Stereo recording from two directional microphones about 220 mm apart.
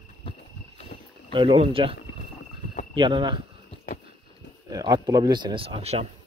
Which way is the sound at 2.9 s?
20° right (ahead or behind).